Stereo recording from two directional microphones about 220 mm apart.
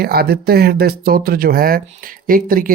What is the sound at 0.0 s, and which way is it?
Speech, 45° right (ahead or behind).